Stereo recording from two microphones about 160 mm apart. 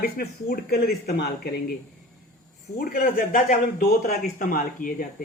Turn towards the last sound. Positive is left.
turn(degrees=60)  # may be behind; listen again after turning